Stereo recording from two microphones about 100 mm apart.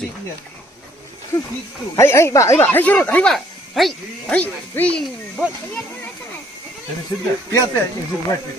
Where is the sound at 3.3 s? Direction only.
Centre (ahead or behind).